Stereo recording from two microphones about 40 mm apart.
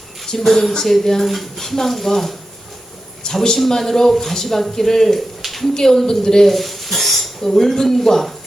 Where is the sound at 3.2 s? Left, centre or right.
Centre.